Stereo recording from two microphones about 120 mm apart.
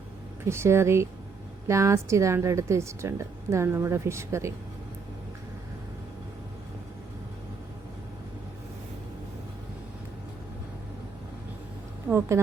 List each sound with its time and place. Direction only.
0.4 s a woman's voice: 20° right (ahead or behind)
12.0 s speech: 20° right (ahead or behind)